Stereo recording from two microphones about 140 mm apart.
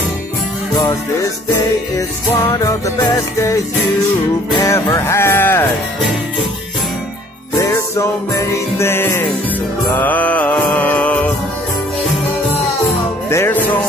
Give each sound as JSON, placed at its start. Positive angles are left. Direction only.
{"t": 2.0, "sound": "music", "side_deg": 25}
{"t": 4.6, "sound": "music", "side_deg": 20}
{"t": 7.5, "sound": "music", "side_deg": 20}
{"t": 13.3, "sound": "music", "side_deg": 15}